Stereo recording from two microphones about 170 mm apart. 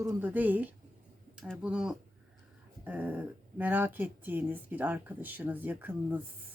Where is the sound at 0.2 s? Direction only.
10° right (ahead or behind).